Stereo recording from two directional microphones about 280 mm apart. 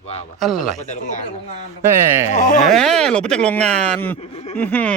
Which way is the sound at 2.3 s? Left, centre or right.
Left.